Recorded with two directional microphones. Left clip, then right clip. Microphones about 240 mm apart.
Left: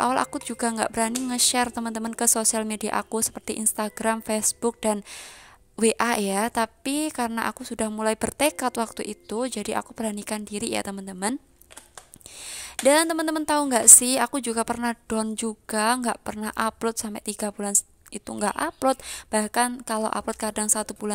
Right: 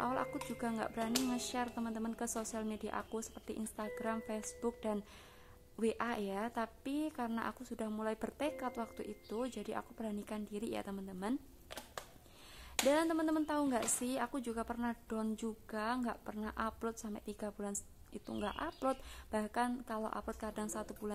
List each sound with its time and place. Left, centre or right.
0.0 s a woman's voice: left
12.4 s a woman's voice: left